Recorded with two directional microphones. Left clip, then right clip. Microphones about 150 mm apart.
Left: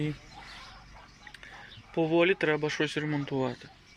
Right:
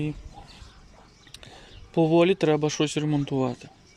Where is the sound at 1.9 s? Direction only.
25° right (ahead or behind).